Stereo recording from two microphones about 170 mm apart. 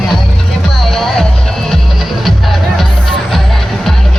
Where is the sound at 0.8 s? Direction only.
Centre (ahead or behind).